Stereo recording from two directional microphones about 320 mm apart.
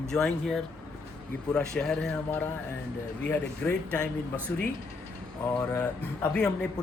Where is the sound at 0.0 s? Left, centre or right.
Centre.